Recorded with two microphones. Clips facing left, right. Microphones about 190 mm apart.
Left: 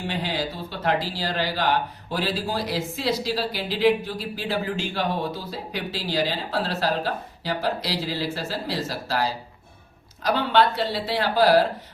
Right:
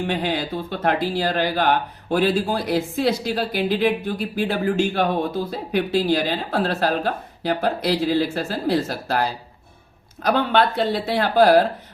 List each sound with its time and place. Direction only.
0.1 s speech: 55° right (ahead or behind)
10.2 s speech: 55° right (ahead or behind)